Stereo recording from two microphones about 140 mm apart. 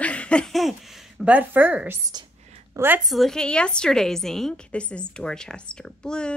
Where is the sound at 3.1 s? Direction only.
Centre (ahead or behind).